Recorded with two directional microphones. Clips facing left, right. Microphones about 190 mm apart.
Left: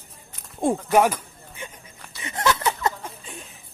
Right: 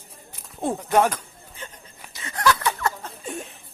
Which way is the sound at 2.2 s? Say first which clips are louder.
Right 1 dB; 20° left (ahead or behind).